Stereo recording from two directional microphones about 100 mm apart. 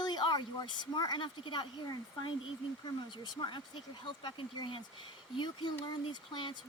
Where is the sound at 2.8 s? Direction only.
50° left (ahead or behind).